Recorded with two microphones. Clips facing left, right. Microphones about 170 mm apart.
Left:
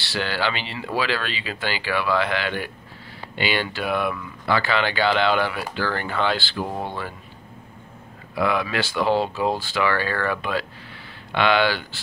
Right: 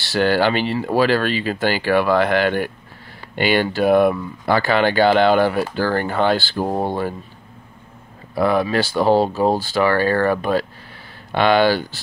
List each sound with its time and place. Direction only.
0.0 s speech: 45° right (ahead or behind)
8.4 s speech: 40° right (ahead or behind)